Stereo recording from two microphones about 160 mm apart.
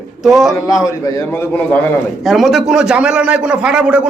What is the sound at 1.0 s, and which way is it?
Speech, 20° left (ahead or behind).